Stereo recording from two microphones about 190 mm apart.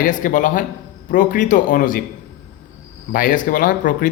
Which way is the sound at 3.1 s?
45° left (ahead or behind).